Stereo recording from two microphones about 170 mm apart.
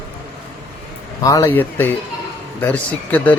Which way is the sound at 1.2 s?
20° left (ahead or behind).